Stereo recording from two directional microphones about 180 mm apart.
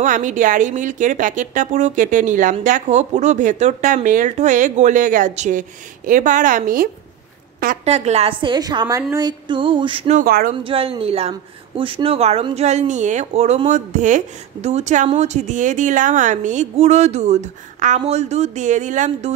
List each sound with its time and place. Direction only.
0.0 s speech: 45° right (ahead or behind)
7.8 s a woman's voice: 35° right (ahead or behind)
10.1 s speech: 50° right (ahead or behind)
10.6 s speech: 30° right (ahead or behind)